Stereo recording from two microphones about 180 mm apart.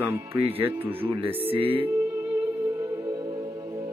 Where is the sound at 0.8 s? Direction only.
30° right (ahead or behind).